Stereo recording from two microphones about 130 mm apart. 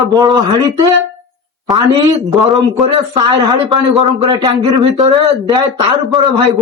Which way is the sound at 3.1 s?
35° right (ahead or behind).